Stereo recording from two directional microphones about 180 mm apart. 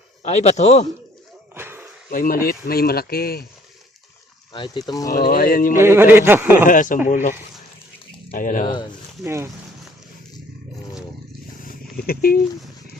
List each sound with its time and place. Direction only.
0.2 s a man's voice: 40° left (ahead or behind)
1.5 s a sound: 10° right (ahead or behind)
2.0 s speech: 50° left (ahead or behind)
4.5 s speech: 25° left (ahead or behind)
5.1 s speech: 60° left (ahead or behind)
5.8 s a man's voice: 15° right (ahead or behind)
6.7 s speech: 50° left (ahead or behind)
8.6 s speech: 25° left (ahead or behind)
9.2 s a man's voice: 15° right (ahead or behind)
11.6 s a sound: 55° left (ahead or behind)